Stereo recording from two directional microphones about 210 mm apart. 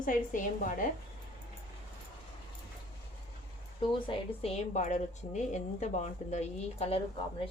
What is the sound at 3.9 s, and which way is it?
A woman's voice, 25° left (ahead or behind).